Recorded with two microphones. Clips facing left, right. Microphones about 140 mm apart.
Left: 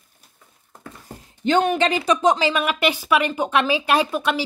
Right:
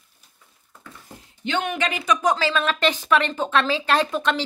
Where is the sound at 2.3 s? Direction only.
15° left (ahead or behind).